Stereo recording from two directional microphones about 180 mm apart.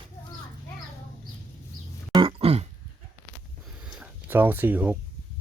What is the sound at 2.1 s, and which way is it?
Throat clearing, 30° right (ahead or behind).